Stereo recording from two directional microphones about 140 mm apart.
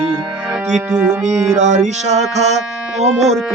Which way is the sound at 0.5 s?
5° right (ahead or behind).